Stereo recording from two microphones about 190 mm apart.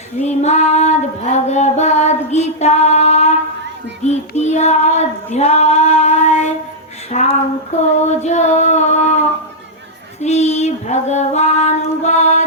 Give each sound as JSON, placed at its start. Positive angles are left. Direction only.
{"t": 0.2, "sound": "child singing", "side_deg": 35}